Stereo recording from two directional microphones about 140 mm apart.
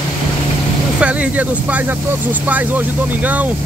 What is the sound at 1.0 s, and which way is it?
Speech, 10° right (ahead or behind).